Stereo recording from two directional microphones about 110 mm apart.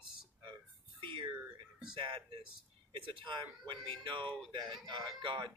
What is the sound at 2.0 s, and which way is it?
Speech, 50° right (ahead or behind).